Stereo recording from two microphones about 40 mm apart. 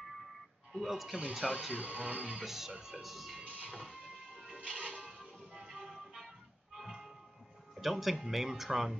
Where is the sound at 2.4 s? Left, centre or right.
Centre.